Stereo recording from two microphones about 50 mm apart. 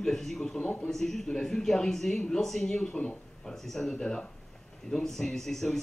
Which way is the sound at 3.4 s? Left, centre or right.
Centre.